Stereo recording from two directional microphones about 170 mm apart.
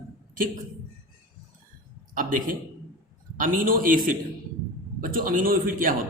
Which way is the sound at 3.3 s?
55° right (ahead or behind).